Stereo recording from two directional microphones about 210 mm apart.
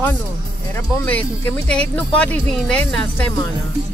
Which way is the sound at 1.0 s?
10° left (ahead or behind).